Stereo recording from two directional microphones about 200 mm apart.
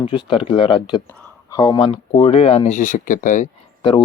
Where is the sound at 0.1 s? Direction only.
25° left (ahead or behind).